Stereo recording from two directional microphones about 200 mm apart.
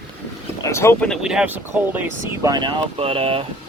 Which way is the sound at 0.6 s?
15° left (ahead or behind).